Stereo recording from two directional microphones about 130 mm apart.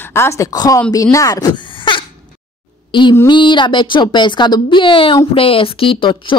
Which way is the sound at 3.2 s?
35° left (ahead or behind).